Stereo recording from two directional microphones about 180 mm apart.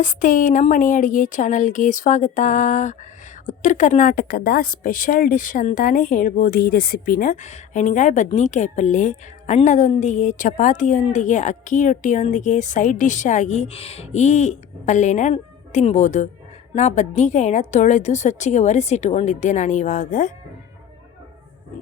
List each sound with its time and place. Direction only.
0.0 s a woman's voice: 45° left (ahead or behind)